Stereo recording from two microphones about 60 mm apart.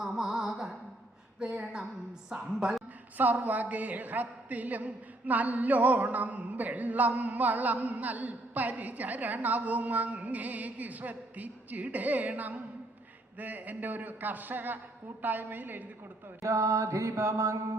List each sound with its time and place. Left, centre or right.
0.0 s music: centre
1.4 s a sound: centre
2.3 s a woman's voice: centre
3.2 s a woman's voice: right
16.4 s mantra: right